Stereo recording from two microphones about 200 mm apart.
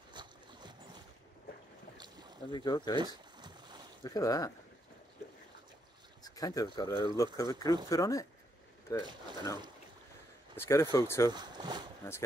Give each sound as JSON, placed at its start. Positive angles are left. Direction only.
{"t": 0.1, "sound": "boat", "side_deg": -20}
{"t": 2.0, "sound": "boat", "side_deg": -20}
{"t": 2.5, "sound": "speech", "side_deg": 20}
{"t": 3.0, "sound": "a sound", "side_deg": -20}
{"t": 4.0, "sound": "speech", "side_deg": 20}
{"t": 6.2, "sound": "speech", "side_deg": 15}
{"t": 10.5, "sound": "speech", "side_deg": 15}
{"t": 11.3, "sound": "speech", "side_deg": -20}
{"t": 12.0, "sound": "speech", "side_deg": 10}